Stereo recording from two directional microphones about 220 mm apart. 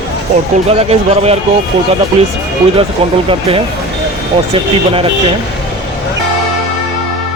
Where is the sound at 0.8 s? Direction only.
30° right (ahead or behind).